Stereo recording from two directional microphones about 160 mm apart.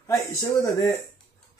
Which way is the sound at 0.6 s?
20° left (ahead or behind).